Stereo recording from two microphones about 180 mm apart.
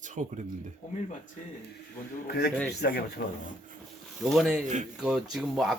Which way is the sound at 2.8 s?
55° left (ahead or behind).